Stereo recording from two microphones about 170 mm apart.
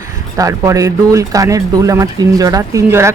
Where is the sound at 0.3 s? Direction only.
20° right (ahead or behind).